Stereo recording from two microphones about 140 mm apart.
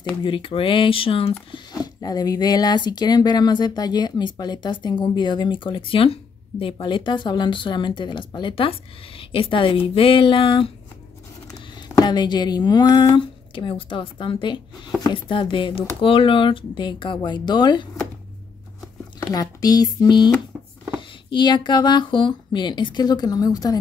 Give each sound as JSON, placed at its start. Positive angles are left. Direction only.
{"t": 0.2, "sound": "speech", "side_deg": 35}
{"t": 1.5, "sound": "speech", "side_deg": 30}
{"t": 12.0, "sound": "speech", "side_deg": 30}
{"t": 19.3, "sound": "speech", "side_deg": 25}
{"t": 21.3, "sound": "speech", "side_deg": 35}